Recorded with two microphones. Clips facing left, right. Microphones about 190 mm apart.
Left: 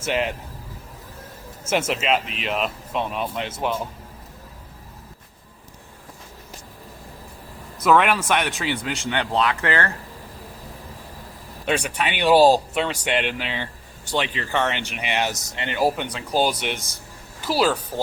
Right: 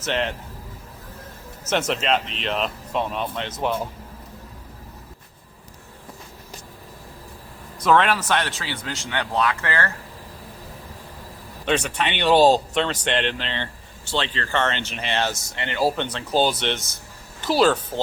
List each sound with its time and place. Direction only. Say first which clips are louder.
0.0 s speech: left 1 dB; 10° left (ahead or behind)
1.9 s speech: even; 5° left (ahead or behind)
7.9 s speech: left 1 dB; 10° left (ahead or behind)
11.6 s speech: right 1 dB; 10° left (ahead or behind)